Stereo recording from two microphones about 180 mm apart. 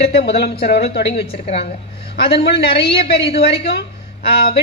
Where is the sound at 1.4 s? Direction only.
35° left (ahead or behind).